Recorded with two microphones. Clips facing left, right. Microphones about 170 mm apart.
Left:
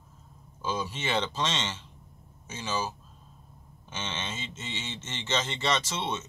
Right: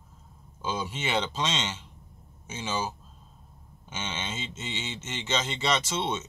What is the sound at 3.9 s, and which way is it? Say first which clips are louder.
Speech: right 1 dB; 20° right (ahead or behind).